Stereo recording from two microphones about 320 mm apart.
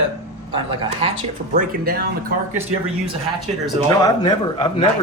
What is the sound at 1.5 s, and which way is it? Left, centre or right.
Speech, right.